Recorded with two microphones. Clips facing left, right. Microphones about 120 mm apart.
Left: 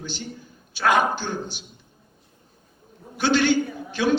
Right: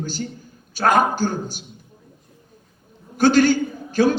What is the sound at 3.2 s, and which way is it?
A man's voice, 40° right (ahead or behind).